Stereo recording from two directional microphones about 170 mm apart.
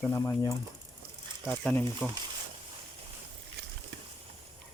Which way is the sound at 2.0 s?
5° left (ahead or behind).